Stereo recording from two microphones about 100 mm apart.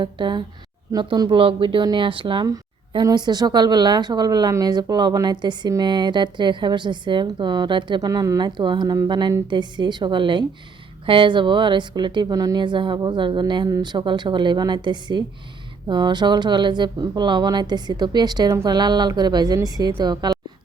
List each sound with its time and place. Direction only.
0.0 s a woman's voice: 50° right (ahead or behind)
1.3 s speech: 60° right (ahead or behind)
2.9 s a woman's voice: 45° right (ahead or behind)
12.6 s a woman's voice: 55° right (ahead or behind)